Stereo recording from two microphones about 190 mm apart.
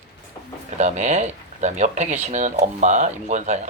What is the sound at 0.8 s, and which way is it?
Speech, 40° right (ahead or behind).